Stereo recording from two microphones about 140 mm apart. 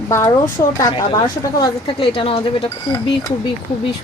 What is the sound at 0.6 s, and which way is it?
Speech, 35° left (ahead or behind).